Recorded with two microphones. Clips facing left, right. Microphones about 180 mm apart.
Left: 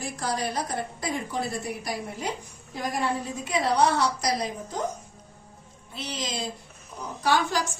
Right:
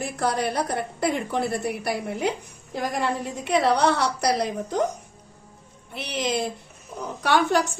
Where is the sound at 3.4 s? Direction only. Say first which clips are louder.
Right 3 dB; 65° right (ahead or behind).